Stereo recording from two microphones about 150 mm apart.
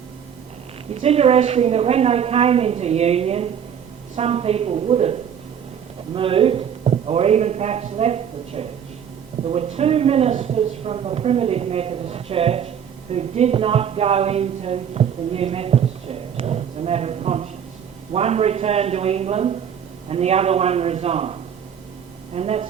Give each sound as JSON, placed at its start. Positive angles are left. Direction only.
{"t": 0.9, "sound": "a woman's voice", "side_deg": -45}
{"t": 22.4, "sound": "a woman's voice", "side_deg": -45}